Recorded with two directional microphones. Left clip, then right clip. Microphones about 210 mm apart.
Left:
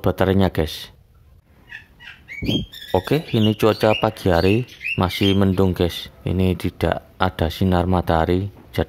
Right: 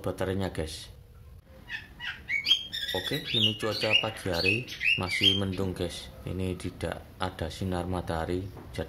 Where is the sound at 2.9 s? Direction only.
50° left (ahead or behind).